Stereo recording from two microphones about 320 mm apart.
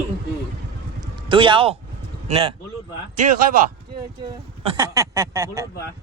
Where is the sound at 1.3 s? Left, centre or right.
Centre.